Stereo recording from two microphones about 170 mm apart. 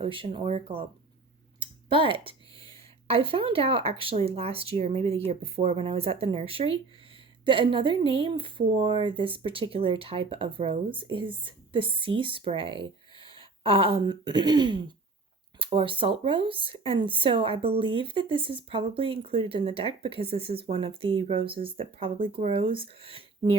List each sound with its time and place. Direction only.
0.0 s speech: 35° right (ahead or behind)